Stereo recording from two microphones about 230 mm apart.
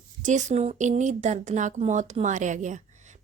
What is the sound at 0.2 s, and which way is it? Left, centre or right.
Speech, right.